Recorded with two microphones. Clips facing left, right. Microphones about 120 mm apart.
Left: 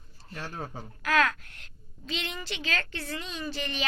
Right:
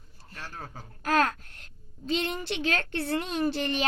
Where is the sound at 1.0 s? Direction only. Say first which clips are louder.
Right 1 dB; 40° right (ahead or behind).